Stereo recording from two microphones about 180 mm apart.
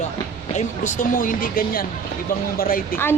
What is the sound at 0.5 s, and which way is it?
Speech, 45° left (ahead or behind).